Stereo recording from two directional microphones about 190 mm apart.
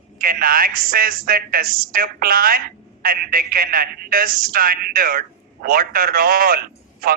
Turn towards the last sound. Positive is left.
turn(degrees=-50)  # may be behind; listen again after turning